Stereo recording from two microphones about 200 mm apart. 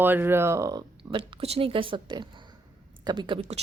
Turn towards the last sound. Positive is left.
turn(degrees=-30)  # may be behind; listen again after turning